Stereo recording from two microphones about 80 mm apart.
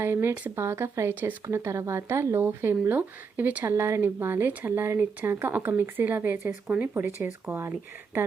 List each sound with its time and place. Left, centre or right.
0.0 s speech: right
3.7 s speech: right